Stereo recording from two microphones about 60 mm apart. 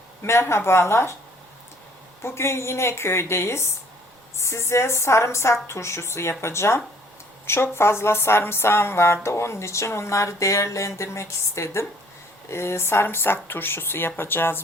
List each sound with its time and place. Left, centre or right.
0.2 s speech: left
2.2 s speech: left